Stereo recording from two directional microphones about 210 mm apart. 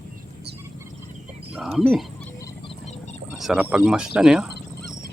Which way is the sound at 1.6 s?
Centre (ahead or behind).